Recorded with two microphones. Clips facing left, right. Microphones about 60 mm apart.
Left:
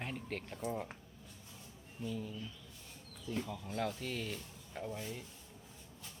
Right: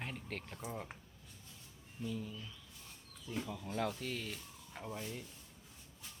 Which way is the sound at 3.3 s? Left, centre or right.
Centre.